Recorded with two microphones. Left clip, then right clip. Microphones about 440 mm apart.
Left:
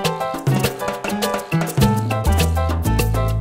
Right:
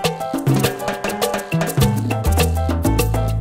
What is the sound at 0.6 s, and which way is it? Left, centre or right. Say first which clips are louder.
Music: right 1 dB; right.